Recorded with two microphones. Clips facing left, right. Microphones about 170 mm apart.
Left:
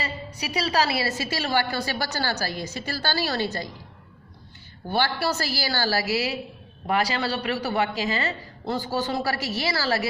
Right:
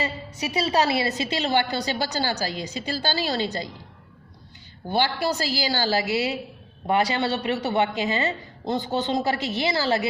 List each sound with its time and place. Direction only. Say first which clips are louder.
0.0 s a woman's voice: right 3 dB; 25° right (ahead or behind)
4.9 s a woman's voice: right 1 dB; 15° right (ahead or behind)